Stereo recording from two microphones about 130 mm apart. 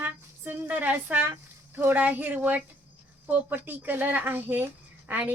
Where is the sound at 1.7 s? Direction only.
15° right (ahead or behind).